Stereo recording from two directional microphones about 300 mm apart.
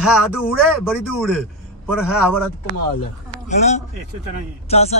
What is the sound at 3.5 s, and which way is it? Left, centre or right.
A man's voice, left.